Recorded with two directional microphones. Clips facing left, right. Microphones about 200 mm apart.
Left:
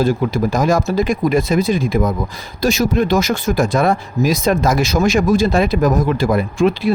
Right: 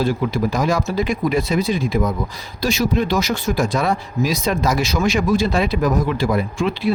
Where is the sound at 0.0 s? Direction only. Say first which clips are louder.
Left 3 dB; 45° left (ahead or behind).